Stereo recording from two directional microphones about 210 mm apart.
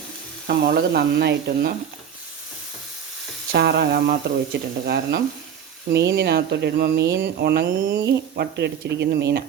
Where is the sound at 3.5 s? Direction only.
50° right (ahead or behind).